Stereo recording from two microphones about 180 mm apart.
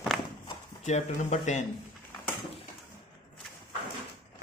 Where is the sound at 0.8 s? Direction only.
40° left (ahead or behind).